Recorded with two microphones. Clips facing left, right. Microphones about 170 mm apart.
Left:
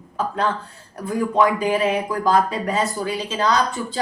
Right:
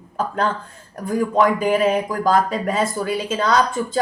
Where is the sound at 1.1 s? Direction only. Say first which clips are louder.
Right 1 dB; 45° right (ahead or behind).